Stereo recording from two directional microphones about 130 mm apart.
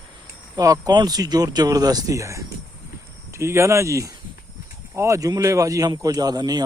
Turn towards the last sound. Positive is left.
turn(degrees=-30)  # may be behind; listen again after turning